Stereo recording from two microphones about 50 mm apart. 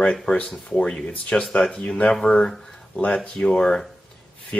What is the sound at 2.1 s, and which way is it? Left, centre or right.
Speech, centre.